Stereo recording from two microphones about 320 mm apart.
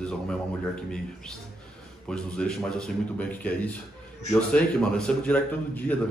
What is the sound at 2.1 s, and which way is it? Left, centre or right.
A man's voice, centre.